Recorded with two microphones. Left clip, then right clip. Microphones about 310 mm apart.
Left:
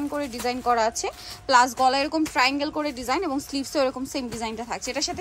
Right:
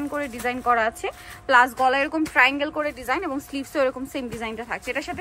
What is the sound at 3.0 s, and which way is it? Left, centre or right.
A woman's voice, centre.